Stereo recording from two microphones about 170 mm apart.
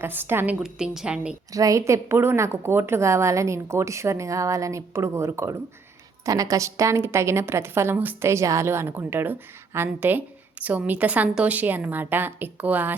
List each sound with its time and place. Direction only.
0.0 s a woman's voice: 10° right (ahead or behind)
1.5 s a woman's voice: 20° right (ahead or behind)